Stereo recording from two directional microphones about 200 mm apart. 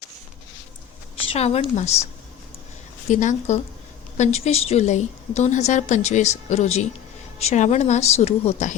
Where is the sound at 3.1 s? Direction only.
40° left (ahead or behind).